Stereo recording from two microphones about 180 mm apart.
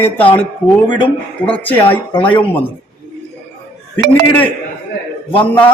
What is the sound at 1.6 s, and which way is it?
Speech, 10° left (ahead or behind).